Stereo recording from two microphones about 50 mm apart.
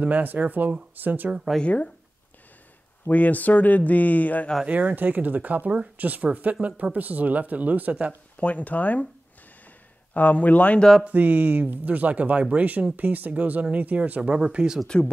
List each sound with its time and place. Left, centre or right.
0.0 s speech: right
1.6 s speech: left
3.1 s speech: left
4.6 s speech: right
8.4 s speech: left
10.1 s speech: left
11.1 s speech: right
14.3 s speech: centre